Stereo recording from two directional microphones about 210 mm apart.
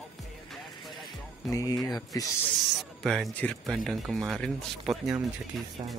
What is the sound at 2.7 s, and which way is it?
Speech, centre (ahead or behind).